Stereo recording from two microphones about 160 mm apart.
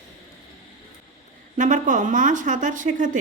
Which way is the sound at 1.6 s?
55° right (ahead or behind).